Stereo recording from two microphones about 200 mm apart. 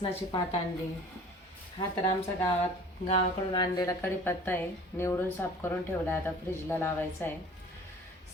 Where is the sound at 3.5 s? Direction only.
15° left (ahead or behind).